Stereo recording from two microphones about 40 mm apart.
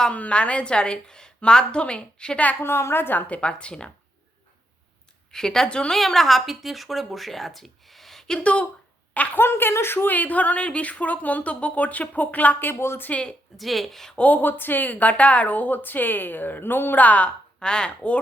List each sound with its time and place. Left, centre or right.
0.1 s a woman's voice: left
2.6 s speech: left
3.2 s a woman's voice: left
5.3 s a woman's voice: centre
5.6 s a woman's voice: left
5.9 s speech: centre
9.3 s speech: left
10.1 s speech: left
13.1 s speech: left
13.6 s speech: centre
14.2 s speech: left
14.4 s a woman's voice: left
17.0 s speech: left
17.2 s a woman's voice: centre